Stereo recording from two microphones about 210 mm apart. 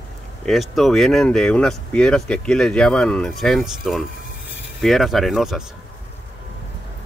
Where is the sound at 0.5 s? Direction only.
Centre (ahead or behind).